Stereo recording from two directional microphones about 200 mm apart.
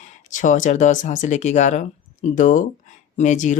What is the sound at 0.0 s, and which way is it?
Speech, 40° left (ahead or behind).